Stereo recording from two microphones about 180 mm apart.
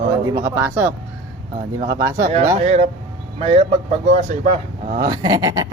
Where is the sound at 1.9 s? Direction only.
20° right (ahead or behind).